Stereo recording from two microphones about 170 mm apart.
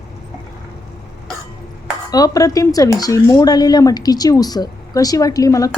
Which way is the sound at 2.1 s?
20° left (ahead or behind).